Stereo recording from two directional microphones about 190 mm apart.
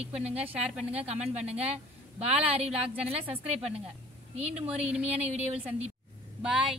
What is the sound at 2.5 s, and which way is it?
Speech, 30° right (ahead or behind).